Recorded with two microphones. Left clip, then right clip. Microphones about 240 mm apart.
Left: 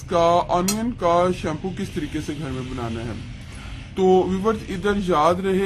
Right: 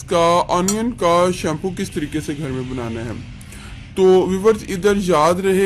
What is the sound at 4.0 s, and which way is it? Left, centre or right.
A man's voice, right.